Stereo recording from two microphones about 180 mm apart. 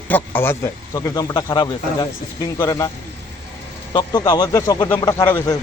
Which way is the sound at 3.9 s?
25° left (ahead or behind).